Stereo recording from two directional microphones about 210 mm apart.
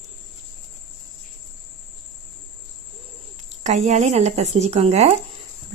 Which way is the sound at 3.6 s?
35° right (ahead or behind).